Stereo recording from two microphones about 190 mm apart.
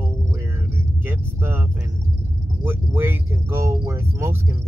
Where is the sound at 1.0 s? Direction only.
10° right (ahead or behind).